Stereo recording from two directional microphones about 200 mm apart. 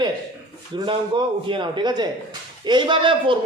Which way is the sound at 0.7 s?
25° right (ahead or behind).